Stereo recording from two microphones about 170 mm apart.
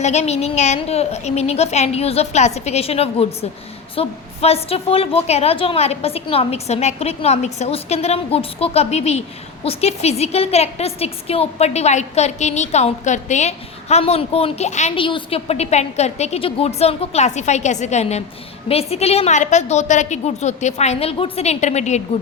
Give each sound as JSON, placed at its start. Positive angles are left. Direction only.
{"t": 0.0, "sound": "a woman's voice", "side_deg": 40}
{"t": 14.9, "sound": "a woman's voice", "side_deg": 30}